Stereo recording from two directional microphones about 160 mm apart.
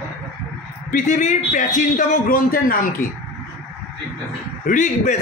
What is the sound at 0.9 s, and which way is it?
A man's voice, 55° left (ahead or behind).